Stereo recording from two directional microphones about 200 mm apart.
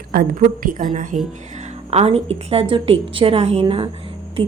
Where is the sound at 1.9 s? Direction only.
30° right (ahead or behind).